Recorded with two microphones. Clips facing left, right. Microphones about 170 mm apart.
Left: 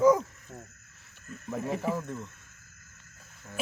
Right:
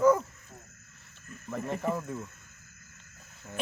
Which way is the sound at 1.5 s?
5° left (ahead or behind).